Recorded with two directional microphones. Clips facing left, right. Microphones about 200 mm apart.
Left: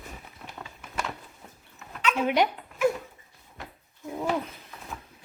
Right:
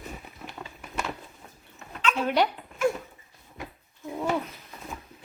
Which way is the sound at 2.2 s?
10° left (ahead or behind).